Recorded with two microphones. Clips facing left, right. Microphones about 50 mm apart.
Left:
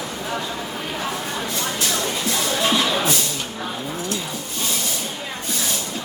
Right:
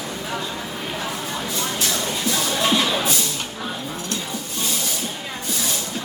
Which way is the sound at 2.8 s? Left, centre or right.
Left.